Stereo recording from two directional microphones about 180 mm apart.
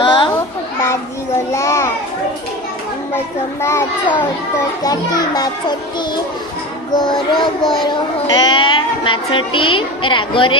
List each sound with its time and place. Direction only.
0.0 s children playing: 30° left (ahead or behind)
1.5 s children playing: 15° left (ahead or behind)
3.6 s a child's voice: 15° left (ahead or behind)
7.3 s speech: 25° left (ahead or behind)